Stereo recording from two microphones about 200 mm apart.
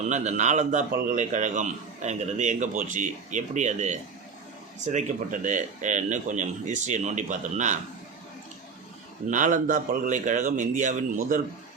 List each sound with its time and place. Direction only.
0.1 s a man's voice: 35° right (ahead or behind)
9.3 s a man's voice: 40° right (ahead or behind)